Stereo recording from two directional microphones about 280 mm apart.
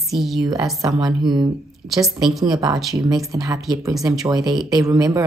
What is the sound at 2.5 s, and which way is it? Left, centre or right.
Speech, centre.